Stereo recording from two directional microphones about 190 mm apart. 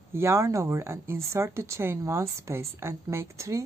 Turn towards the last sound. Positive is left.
turn(degrees=-15)  # may be behind; listen again after turning